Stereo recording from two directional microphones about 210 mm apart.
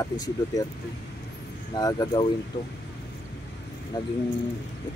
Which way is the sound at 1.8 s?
20° left (ahead or behind).